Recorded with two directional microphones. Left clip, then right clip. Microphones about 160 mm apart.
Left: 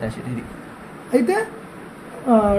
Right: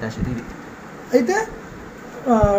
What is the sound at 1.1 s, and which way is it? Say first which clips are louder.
Speech: right 1 dB; 40° left (ahead or behind).